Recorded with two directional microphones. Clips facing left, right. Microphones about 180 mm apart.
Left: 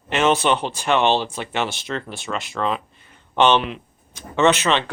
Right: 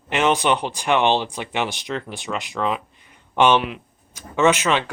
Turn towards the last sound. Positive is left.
turn(degrees=-10)  # may be behind; listen again after turning